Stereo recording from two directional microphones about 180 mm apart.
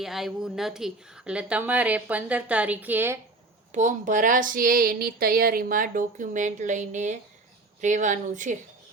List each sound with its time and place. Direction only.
0.0 s speech: centre (ahead or behind)
3.7 s speech: 40° right (ahead or behind)